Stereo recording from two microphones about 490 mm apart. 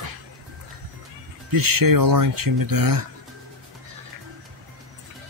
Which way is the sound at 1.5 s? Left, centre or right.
Right.